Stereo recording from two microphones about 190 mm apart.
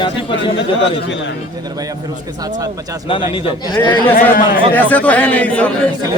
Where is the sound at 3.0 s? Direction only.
25° left (ahead or behind).